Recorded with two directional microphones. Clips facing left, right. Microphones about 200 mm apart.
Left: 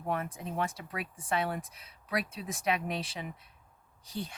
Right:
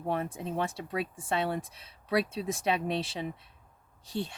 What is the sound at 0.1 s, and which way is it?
Speech, 25° right (ahead or behind).